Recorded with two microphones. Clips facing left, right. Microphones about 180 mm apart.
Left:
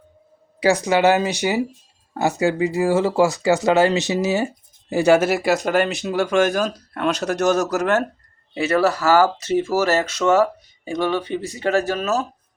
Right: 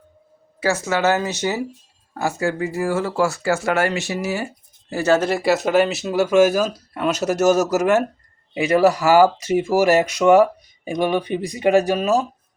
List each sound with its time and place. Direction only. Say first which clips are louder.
0.6 s speech: left 3 dB; 15° left (ahead or behind); by 12.2 s 10° right (ahead or behind)